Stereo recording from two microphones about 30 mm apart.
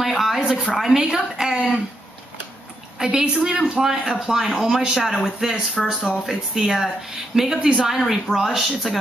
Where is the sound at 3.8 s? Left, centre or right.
Centre.